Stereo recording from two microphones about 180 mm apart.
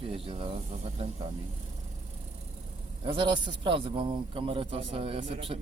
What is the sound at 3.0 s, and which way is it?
A man's voice, 25° right (ahead or behind).